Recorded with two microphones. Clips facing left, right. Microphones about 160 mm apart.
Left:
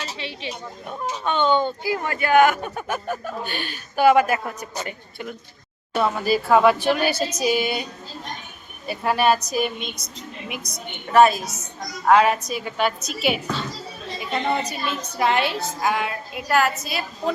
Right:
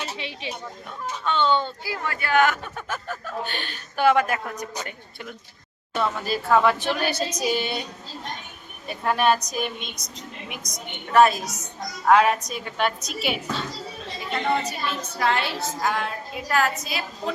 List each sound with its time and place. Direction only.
0.2 s speech: 15° right (ahead or behind)
0.9 s speech: 15° left (ahead or behind)
5.9 s speech: 10° left (ahead or behind)
8.9 s a woman's voice: 5° left (ahead or behind)
11.4 s a woman's voice: 15° right (ahead or behind)
12.0 s a woman's voice: centre (ahead or behind)
14.6 s speech: 20° left (ahead or behind); by 17.0 s centre (ahead or behind)